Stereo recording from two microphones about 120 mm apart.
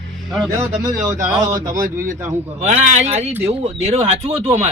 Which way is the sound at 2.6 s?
80° right.